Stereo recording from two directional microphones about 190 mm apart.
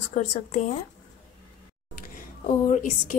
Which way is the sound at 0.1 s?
35° left (ahead or behind).